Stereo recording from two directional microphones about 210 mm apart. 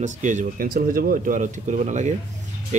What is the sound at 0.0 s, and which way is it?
Speech, 35° right (ahead or behind).